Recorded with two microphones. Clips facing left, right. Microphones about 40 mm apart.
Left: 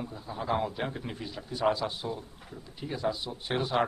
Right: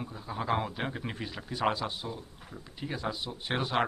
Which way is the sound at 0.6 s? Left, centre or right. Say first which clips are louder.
Left 2 dB; right.